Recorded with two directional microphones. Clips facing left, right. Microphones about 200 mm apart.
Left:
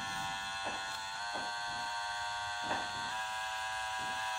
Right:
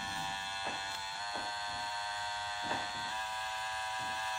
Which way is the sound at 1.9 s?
20° right (ahead or behind).